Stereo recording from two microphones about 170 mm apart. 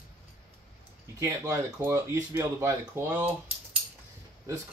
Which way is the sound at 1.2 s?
20° right (ahead or behind).